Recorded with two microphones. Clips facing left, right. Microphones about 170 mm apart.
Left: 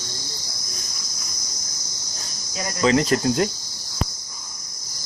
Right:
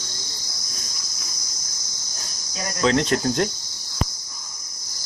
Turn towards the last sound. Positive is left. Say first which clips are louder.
# left 2 dB
turn(degrees=5)  # may be behind; listen again after turning